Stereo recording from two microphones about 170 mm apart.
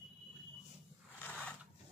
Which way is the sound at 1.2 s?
10° left (ahead or behind).